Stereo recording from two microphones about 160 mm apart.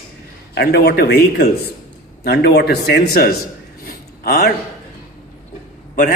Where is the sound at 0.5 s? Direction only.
85° left.